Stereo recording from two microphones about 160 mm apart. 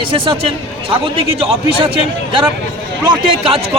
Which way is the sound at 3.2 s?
35° right (ahead or behind).